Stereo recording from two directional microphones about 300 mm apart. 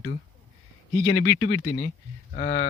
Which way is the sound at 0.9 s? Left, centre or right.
Centre.